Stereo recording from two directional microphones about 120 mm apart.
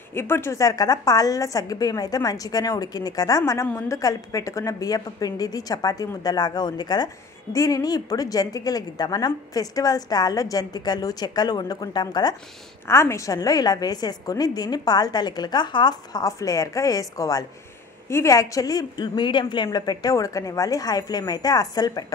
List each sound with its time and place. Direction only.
0.1 s a woman's voice: 20° left (ahead or behind); by 12.4 s 35° left (ahead or behind)
12.8 s a woman's voice: 25° left (ahead or behind)